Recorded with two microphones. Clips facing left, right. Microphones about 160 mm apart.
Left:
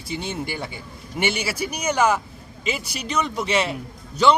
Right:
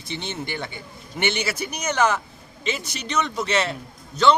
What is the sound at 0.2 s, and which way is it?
A man's voice, 5° left (ahead or behind).